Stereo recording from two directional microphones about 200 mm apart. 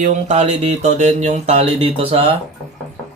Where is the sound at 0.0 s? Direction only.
35° right (ahead or behind).